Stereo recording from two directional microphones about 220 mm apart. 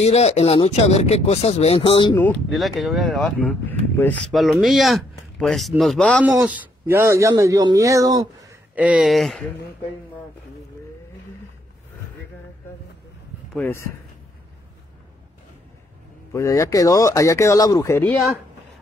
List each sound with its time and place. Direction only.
0.0 s speech: 30° left (ahead or behind)
2.1 s speech: 5° left (ahead or behind)
6.2 s speech: 10° right (ahead or behind)
13.5 s speech: 10° left (ahead or behind)
16.3 s speech: 15° left (ahead or behind)